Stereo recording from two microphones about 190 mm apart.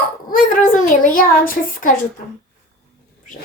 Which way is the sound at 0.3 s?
45° left (ahead or behind).